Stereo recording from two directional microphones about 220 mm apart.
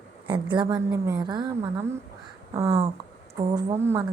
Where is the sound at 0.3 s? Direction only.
20° right (ahead or behind).